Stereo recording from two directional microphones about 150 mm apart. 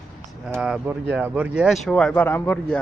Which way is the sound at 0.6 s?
5° right (ahead or behind).